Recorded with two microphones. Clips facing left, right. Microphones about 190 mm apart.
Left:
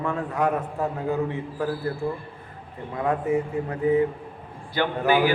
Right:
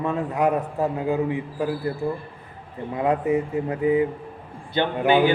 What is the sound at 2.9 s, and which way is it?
A man's voice, 20° right (ahead or behind).